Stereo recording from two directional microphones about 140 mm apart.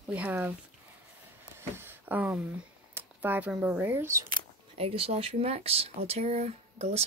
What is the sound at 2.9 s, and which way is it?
Speech, 15° right (ahead or behind).